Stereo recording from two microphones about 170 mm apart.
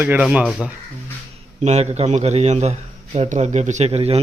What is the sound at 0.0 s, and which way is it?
Speech, 10° right (ahead or behind).